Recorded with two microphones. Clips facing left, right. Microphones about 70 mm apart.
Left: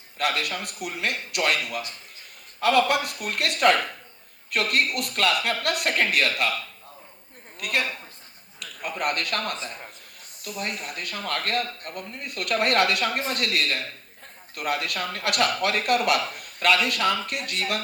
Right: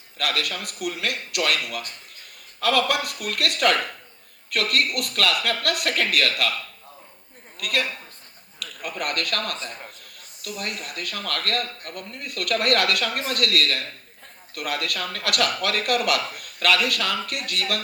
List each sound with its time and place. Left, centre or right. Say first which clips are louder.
0.2 s speech: left 1 dB; left
7.6 s speech: right 1 dB; left